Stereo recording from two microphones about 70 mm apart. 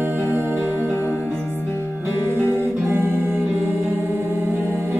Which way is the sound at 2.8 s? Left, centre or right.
Right.